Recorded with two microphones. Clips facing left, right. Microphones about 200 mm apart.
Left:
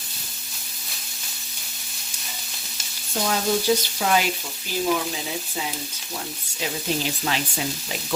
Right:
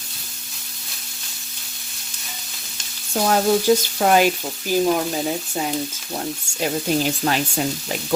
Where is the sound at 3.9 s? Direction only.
50° right (ahead or behind).